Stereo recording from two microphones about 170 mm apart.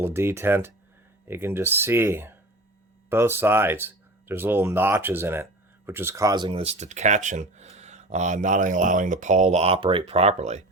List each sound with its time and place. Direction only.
0.0 s speech: 15° right (ahead or behind); by 10.6 s 40° right (ahead or behind)